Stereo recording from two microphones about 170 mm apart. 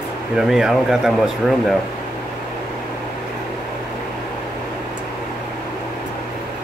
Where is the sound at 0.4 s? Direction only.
5° right (ahead or behind).